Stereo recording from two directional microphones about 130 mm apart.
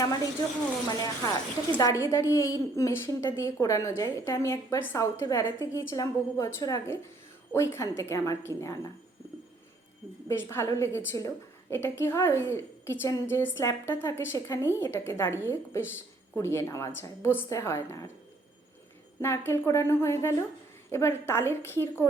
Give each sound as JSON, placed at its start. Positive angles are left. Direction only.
{"t": 0.9, "sound": "a woman's voice", "side_deg": 30}
{"t": 7.5, "sound": "a woman's voice", "side_deg": 20}
{"t": 10.2, "sound": "a woman's voice", "side_deg": 20}
{"t": 19.2, "sound": "a woman's voice", "side_deg": 20}